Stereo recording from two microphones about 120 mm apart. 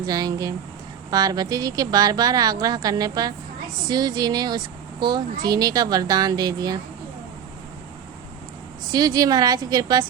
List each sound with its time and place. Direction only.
0.0 s speech: 35° right (ahead or behind)
8.9 s speech: 35° right (ahead or behind)